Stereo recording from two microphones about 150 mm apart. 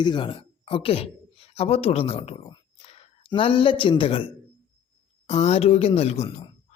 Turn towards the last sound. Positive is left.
turn(degrees=45)  # may be behind; listen again after turning